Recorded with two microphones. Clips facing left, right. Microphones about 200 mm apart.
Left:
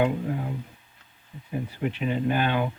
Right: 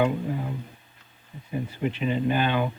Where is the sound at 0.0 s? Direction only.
5° left (ahead or behind).